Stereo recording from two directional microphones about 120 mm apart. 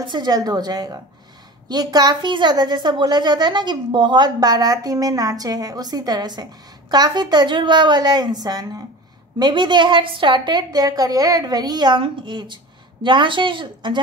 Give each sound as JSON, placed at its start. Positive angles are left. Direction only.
{"t": 0.0, "sound": "a woman's voice", "side_deg": -40}